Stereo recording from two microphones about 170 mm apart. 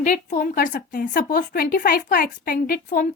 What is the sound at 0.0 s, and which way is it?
A woman's voice, 50° left (ahead or behind).